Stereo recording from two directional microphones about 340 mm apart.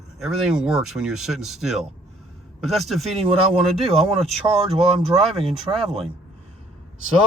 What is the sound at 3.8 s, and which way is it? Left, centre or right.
Speech, centre.